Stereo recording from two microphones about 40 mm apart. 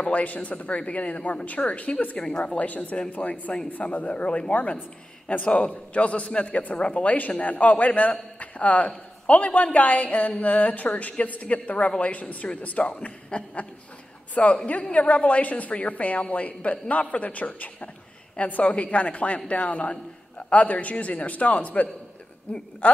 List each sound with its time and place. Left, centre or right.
0.0 s a woman's voice: left
2.1 s a woman's voice: left
2.5 s a woman's voice: left
14.7 s a woman's voice: left